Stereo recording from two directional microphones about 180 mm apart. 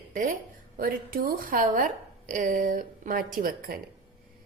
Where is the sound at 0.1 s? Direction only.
50° right (ahead or behind).